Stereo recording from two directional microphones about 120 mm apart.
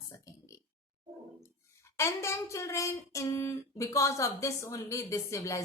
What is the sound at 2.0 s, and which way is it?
Speech, 25° left (ahead or behind).